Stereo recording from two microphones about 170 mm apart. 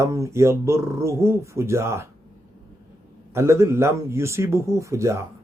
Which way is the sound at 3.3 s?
15° right (ahead or behind).